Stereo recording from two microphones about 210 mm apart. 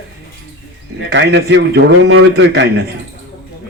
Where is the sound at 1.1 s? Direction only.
60° right (ahead or behind).